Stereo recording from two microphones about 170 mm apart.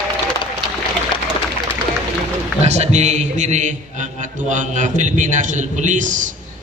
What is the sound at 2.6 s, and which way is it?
A man's voice, 40° right (ahead or behind).